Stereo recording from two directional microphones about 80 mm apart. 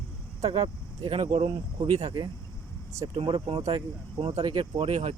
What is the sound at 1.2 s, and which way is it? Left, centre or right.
Speech, right.